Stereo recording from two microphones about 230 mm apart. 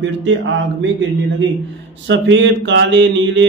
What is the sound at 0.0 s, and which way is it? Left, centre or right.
Speech, right.